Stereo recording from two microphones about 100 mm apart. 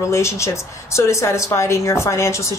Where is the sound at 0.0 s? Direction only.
30° left (ahead or behind).